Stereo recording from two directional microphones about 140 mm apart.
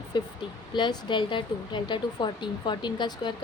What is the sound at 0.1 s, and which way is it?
Speech, 35° left (ahead or behind).